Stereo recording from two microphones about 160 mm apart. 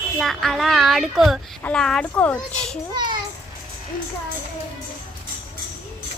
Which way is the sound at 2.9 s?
25° right (ahead or behind).